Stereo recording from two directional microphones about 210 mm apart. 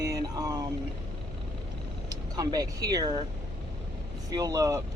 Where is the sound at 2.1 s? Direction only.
20° right (ahead or behind).